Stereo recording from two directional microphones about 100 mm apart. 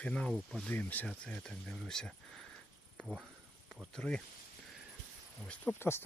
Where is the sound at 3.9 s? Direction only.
10° left (ahead or behind).